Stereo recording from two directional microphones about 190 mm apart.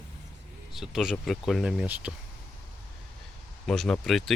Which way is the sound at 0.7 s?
Centre (ahead or behind).